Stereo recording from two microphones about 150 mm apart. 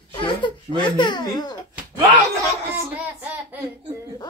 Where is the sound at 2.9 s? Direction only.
10° right (ahead or behind).